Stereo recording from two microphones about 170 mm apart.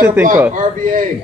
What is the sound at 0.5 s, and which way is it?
Speech, 50° right (ahead or behind).